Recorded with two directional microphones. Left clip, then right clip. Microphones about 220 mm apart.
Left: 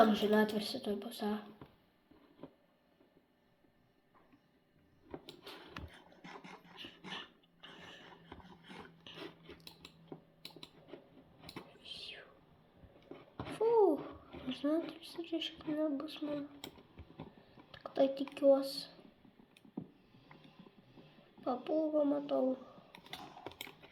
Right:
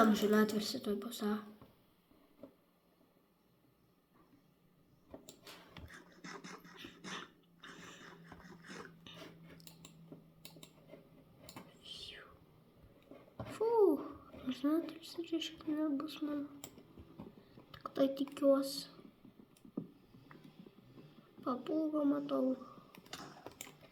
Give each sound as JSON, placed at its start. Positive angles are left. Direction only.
{"t": 0.0, "sound": "a woman's voice", "side_deg": -15}
{"t": 6.7, "sound": "dog", "side_deg": -25}
{"t": 7.8, "sound": "a sound", "side_deg": -20}
{"t": 8.4, "sound": "a sound", "side_deg": 0}
{"t": 11.8, "sound": "whispering", "side_deg": -15}
{"t": 13.1, "sound": "a sound", "side_deg": -20}
{"t": 14.4, "sound": "a woman's voice", "side_deg": -20}
{"t": 17.7, "sound": "speech", "side_deg": -20}
{"t": 21.4, "sound": "a woman's voice", "side_deg": -20}
{"t": 22.9, "sound": "typewriter", "side_deg": -10}